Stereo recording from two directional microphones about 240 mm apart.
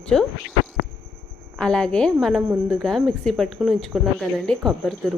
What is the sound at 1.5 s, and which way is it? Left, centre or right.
A woman's voice, centre.